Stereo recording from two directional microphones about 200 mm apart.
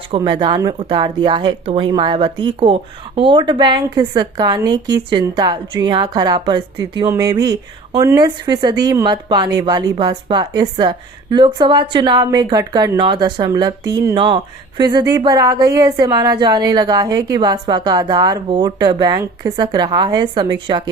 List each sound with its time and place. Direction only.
0.2 s a woman's voice: 20° right (ahead or behind)